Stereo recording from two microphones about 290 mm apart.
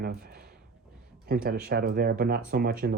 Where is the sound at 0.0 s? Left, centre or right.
Right.